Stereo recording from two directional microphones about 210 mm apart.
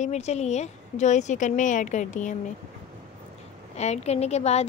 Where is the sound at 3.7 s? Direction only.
30° left (ahead or behind).